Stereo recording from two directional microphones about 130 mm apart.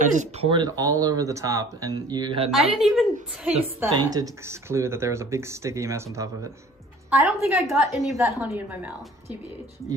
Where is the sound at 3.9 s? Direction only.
30° right (ahead or behind); by 7.5 s 15° right (ahead or behind).